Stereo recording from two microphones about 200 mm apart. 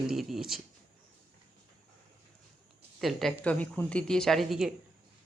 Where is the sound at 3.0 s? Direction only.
Centre (ahead or behind).